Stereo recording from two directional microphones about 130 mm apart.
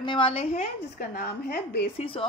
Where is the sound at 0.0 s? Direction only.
40° left (ahead or behind).